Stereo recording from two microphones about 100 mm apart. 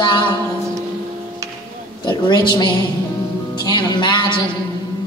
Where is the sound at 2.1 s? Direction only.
50° left (ahead or behind).